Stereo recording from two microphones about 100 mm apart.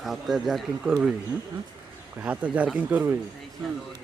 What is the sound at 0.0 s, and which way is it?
Speech, centre (ahead or behind).